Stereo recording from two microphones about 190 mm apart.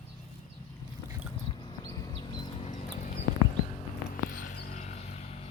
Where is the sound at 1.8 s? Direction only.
20° left (ahead or behind).